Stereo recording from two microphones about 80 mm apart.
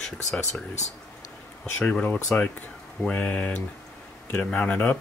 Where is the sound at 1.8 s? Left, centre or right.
Centre.